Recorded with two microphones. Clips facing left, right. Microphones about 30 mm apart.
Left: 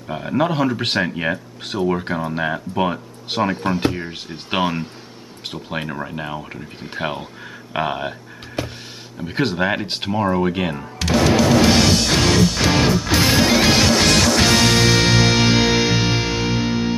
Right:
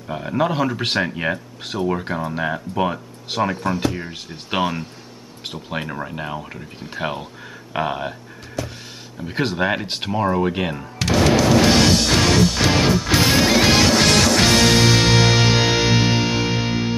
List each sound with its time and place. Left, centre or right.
0.1 s speech: centre; by 3.9 s left
3.9 s speech: centre
8.6 s music: left
9.2 s speech: centre
12.1 s music: centre